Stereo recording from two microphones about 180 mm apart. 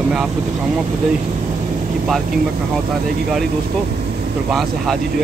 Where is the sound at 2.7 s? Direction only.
Centre (ahead or behind).